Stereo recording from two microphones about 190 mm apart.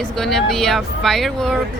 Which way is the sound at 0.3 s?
Centre (ahead or behind).